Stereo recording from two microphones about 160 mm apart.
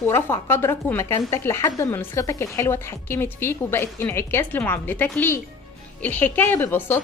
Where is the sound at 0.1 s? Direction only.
15° left (ahead or behind).